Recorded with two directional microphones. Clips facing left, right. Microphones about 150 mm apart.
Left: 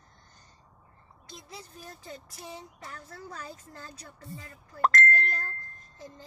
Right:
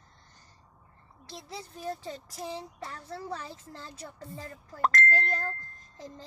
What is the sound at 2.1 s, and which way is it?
Speech, 35° right (ahead or behind).